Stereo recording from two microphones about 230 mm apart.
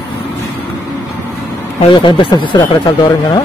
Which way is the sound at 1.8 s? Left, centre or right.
Left.